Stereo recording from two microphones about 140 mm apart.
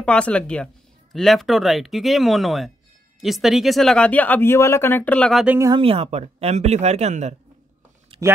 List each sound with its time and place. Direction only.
0.0 s speech: 10° left (ahead or behind)
5.8 s speech: 45° right (ahead or behind)